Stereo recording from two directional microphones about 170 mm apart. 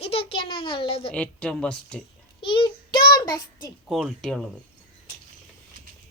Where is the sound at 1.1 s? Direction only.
5° left (ahead or behind).